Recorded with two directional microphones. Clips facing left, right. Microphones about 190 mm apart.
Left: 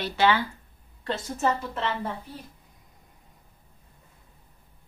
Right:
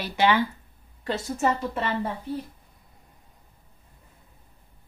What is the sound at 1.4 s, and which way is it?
Speech, 5° right (ahead or behind).